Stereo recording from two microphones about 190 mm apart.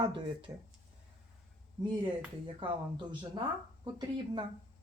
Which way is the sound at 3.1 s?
25° right (ahead or behind).